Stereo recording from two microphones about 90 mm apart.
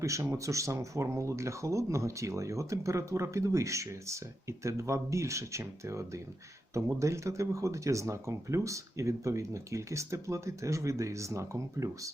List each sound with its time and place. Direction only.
0.0 s speech: 35° right (ahead or behind)